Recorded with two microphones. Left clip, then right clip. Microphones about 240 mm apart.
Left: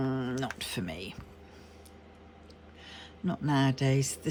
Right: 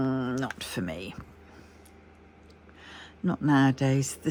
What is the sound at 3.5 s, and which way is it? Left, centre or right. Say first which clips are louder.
Speech: right 4 dB; centre.